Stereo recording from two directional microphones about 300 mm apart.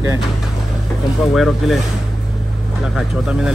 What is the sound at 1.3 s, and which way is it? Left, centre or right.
Speech, centre.